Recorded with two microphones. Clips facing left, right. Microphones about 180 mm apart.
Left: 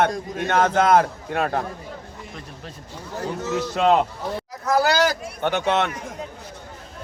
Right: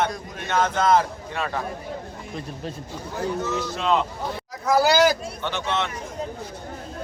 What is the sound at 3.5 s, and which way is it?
Speech, 70° left (ahead or behind).